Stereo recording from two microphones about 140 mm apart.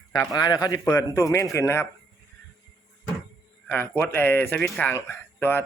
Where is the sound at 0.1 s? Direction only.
25° left (ahead or behind).